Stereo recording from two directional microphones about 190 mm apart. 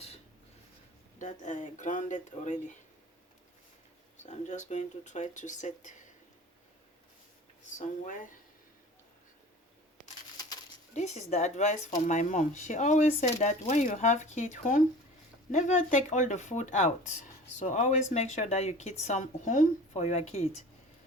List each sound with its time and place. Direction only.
1.2 s speech: 40° left (ahead or behind)
4.2 s speech: 40° left (ahead or behind)
7.8 s speech: 45° left (ahead or behind)
10.9 s speech: 35° left (ahead or behind)